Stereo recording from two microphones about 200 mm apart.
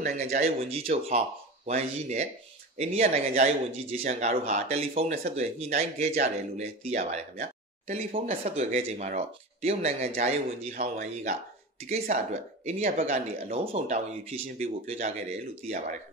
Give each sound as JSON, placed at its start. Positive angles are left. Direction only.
{"t": 0.0, "sound": "speech", "side_deg": -40}